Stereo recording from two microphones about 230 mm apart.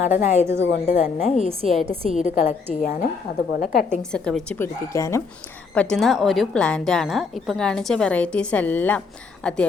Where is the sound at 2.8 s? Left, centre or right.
Left.